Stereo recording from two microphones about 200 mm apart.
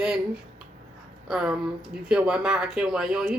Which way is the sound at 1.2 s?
Centre (ahead or behind).